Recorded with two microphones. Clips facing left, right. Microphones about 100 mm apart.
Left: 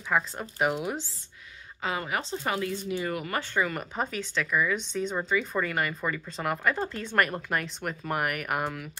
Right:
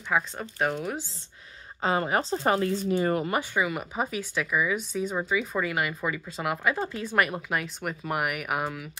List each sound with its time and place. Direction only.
0.1 s speech: 5° left (ahead or behind)
1.8 s speech: 35° right (ahead or behind)
3.5 s speech: 5° right (ahead or behind)